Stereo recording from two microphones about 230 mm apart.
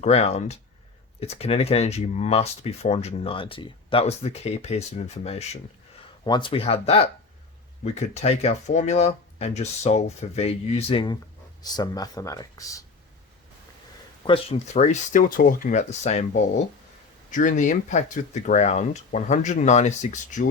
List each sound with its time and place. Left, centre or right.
0.0 s speech: left
14.3 s speech: left
17.3 s speech: left